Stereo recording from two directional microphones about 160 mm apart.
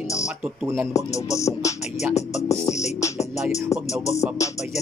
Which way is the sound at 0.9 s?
20° left (ahead or behind).